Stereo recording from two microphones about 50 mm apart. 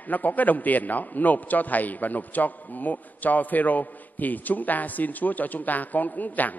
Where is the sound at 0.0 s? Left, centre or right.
Left.